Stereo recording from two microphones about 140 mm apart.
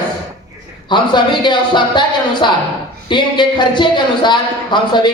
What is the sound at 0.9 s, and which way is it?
Speech, 35° left (ahead or behind).